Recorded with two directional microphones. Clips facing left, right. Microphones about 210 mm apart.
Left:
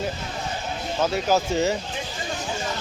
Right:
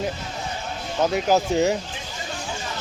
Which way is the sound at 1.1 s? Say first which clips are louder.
Right 3 dB; 10° right (ahead or behind).